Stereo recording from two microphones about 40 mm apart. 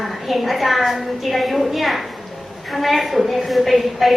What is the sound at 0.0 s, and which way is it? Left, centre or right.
A woman's voice, centre.